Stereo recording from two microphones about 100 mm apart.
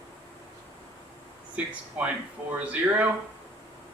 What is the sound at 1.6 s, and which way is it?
Speech, 10° right (ahead or behind).